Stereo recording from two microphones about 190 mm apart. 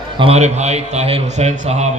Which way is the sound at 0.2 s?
30° right (ahead or behind).